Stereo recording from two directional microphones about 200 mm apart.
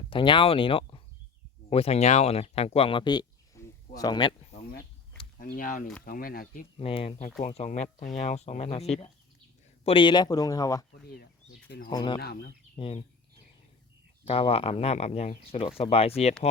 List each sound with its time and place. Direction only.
0.1 s speech: 25° left (ahead or behind)
5.4 s speech: 45° left (ahead or behind)
6.7 s speech: 30° left (ahead or behind)
11.0 s speech: 50° left (ahead or behind)
11.9 s speech: 20° left (ahead or behind)
12.2 s speech: 50° left (ahead or behind)
12.8 s speech: 25° left (ahead or behind)
14.3 s speech: 30° left (ahead or behind)